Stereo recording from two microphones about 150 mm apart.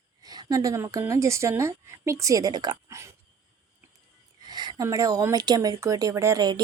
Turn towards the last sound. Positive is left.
turn(degrees=-25)  # may be behind; listen again after turning